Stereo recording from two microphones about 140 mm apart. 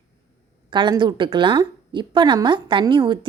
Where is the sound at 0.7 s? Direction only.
35° right (ahead or behind).